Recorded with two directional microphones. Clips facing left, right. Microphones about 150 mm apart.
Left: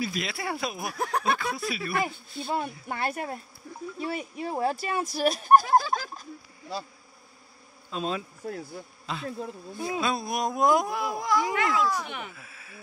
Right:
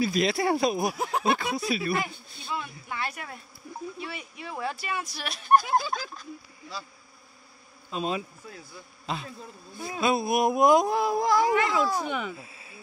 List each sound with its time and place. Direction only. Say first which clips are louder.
0.0 s speech: right 7 dB; 30° right (ahead or behind)
0.8 s speech: right 2 dB; 10° right (ahead or behind)
2.4 s speech: left 5 dB; 45° left (ahead or behind)
7.9 s speech: right 1 dB; 5° right (ahead or behind)
8.5 s bee: left 9 dB; 55° left (ahead or behind)
9.0 s speech: right 1 dB; 20° right (ahead or behind)
9.9 s speech: right 5 dB; 10° right (ahead or behind); by 12.7 s 25° right (ahead or behind)